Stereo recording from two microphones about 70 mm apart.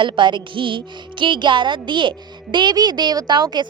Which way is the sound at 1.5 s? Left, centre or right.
Right.